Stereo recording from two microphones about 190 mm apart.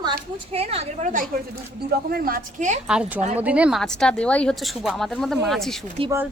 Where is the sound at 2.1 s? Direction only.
50° right (ahead or behind).